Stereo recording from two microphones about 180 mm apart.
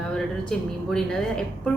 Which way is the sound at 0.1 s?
5° left (ahead or behind).